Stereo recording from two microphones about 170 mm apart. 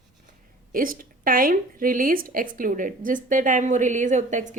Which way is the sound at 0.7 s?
55° right (ahead or behind).